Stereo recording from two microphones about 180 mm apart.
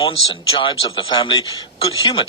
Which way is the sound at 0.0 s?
30° left (ahead or behind).